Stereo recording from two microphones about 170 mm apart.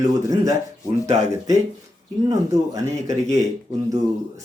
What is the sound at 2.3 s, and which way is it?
Speech, 20° right (ahead or behind).